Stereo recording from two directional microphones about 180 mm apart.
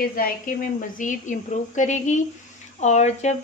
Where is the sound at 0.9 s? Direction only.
45° left (ahead or behind).